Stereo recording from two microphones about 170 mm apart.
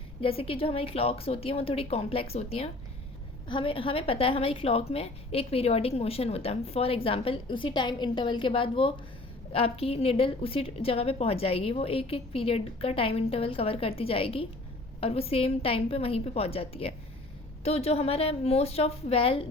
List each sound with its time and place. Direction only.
0.2 s a woman's voice: 35° left (ahead or behind)